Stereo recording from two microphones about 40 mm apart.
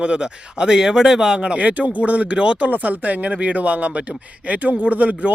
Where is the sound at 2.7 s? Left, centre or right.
Right.